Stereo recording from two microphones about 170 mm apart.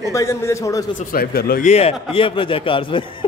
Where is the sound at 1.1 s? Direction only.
65° left (ahead or behind).